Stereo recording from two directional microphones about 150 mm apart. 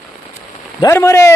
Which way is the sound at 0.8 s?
20° left (ahead or behind).